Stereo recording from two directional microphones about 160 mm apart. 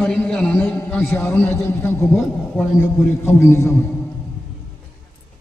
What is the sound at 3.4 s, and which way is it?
Speech, 15° left (ahead or behind).